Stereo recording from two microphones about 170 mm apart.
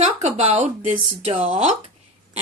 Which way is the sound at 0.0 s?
40° right (ahead or behind).